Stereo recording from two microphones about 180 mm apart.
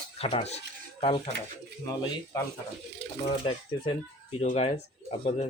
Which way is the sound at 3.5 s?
30° left (ahead or behind).